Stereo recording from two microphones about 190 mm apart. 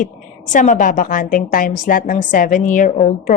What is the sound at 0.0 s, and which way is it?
A woman's voice, 40° left (ahead or behind).